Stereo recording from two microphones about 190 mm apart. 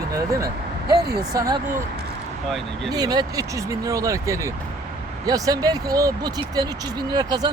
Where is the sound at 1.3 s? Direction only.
20° right (ahead or behind).